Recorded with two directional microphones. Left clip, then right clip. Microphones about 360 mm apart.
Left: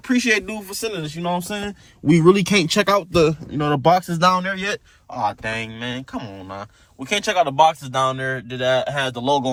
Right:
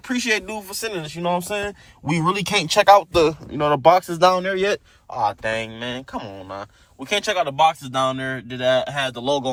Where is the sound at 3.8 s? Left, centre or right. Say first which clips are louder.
Right 2 dB; centre.